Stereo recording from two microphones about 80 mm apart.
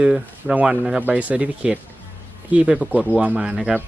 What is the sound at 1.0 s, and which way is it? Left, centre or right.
Speech, centre.